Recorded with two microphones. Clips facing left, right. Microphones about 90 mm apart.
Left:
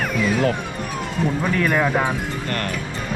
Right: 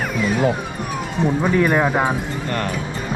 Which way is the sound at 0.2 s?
10° right (ahead or behind).